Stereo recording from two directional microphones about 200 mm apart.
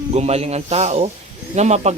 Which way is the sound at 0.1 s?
30° right (ahead or behind).